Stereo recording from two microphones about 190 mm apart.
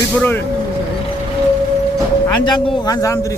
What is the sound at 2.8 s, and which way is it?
Speech, 20° left (ahead or behind).